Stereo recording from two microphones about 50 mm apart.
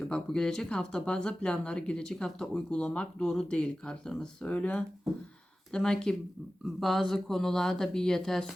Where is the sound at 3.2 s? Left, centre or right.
Centre.